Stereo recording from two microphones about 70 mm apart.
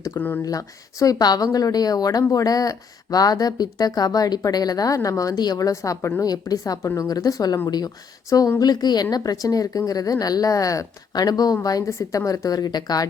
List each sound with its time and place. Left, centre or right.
0.4 s speech: left
4.9 s a woman's voice: left
6.1 s speech: left
11.5 s speech: left